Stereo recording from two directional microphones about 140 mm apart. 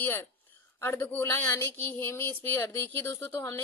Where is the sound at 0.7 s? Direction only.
20° left (ahead or behind).